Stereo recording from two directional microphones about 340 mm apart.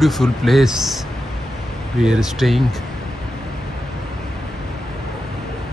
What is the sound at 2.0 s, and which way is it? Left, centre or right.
Speech, centre.